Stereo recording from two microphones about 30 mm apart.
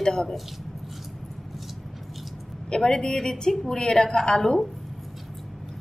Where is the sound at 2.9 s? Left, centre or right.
Centre.